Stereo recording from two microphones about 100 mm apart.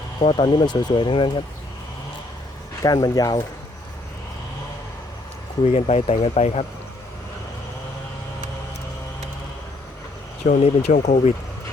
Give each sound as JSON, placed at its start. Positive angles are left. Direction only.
{"t": 0.2, "sound": "speech", "side_deg": 65}
{"t": 0.5, "sound": "speech", "side_deg": 45}
{"t": 2.8, "sound": "speech", "side_deg": 40}
{"t": 5.6, "sound": "speech", "side_deg": 85}
{"t": 10.6, "sound": "speech", "side_deg": 90}